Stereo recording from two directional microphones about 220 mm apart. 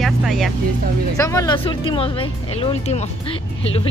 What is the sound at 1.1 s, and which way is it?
Speech, 15° left (ahead or behind).